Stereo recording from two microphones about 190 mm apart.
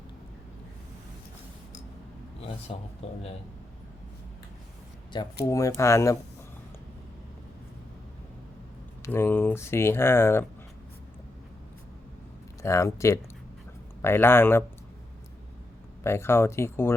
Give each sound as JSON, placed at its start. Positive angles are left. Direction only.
{"t": 2.7, "sound": "speech", "side_deg": 35}
{"t": 5.1, "sound": "speech", "side_deg": 25}
{"t": 9.0, "sound": "speech", "side_deg": 10}
{"t": 12.6, "sound": "speech", "side_deg": 15}
{"t": 16.0, "sound": "speech", "side_deg": 15}